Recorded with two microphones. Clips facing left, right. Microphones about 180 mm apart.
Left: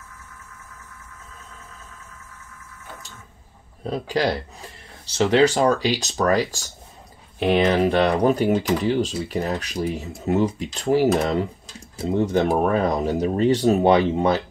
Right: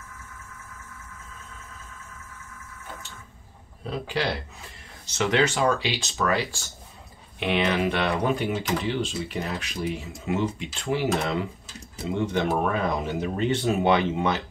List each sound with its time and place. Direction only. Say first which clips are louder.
3.8 s speech: left 6 dB; 40° left (ahead or behind)
12.1 s speech: left 5 dB; 40° left (ahead or behind)